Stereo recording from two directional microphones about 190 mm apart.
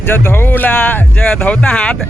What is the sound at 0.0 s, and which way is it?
Speech, 10° left (ahead or behind).